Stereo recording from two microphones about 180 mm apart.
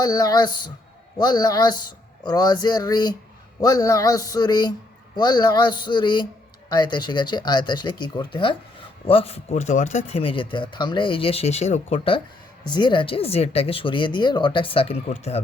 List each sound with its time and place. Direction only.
0.0 s speech: 20° left (ahead or behind)